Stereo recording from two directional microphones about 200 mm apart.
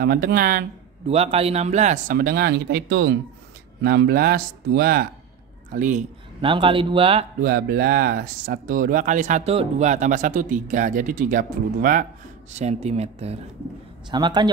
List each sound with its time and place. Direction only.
0.0 s speech: 50° right (ahead or behind)
1.0 s speech: 30° right (ahead or behind)
6.4 s speech: 25° right (ahead or behind)
7.4 s speech: 50° right (ahead or behind); by 14.5 s 20° right (ahead or behind)